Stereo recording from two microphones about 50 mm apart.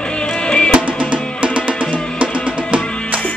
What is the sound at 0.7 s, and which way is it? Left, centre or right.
Music, right.